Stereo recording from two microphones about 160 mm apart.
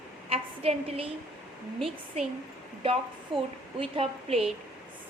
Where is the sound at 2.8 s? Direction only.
35° right (ahead or behind).